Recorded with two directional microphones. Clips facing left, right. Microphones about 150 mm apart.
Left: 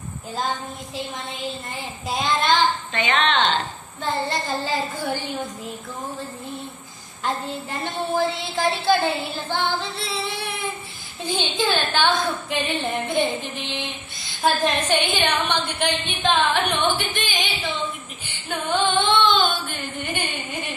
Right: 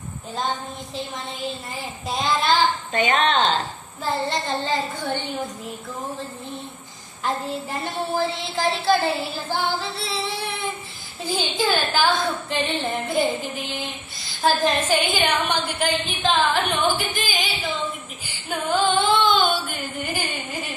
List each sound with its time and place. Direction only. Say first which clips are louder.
0.9 s a woman's voice: even; centre (ahead or behind)
2.9 s a woman's voice: right 2 dB; 40° right (ahead or behind)
4.0 s a woman's voice: even; centre (ahead or behind)
7.2 s a woman's voice: right 1 dB; centre (ahead or behind)
18.2 s female singing: right 1 dB; 5° right (ahead or behind)
19.3 s a sound: right 1 dB; 10° right (ahead or behind)